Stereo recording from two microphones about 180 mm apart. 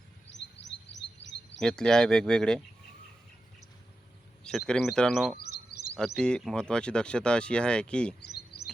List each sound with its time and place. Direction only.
0.3 s chirp: 80° left
1.6 s speech: 5° left (ahead or behind)
4.4 s speech: 5° left (ahead or behind)
5.7 s a sound: 60° left (ahead or behind)
6.1 s speech: 5° left (ahead or behind)
8.2 s a sound: 65° left (ahead or behind)